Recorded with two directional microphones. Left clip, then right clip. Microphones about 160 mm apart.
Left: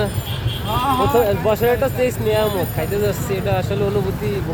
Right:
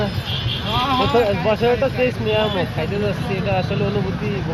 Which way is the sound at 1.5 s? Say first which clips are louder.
Even; 20° left (ahead or behind).